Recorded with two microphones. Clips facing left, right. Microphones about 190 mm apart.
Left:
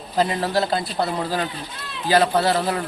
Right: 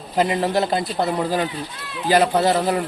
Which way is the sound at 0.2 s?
20° right (ahead or behind).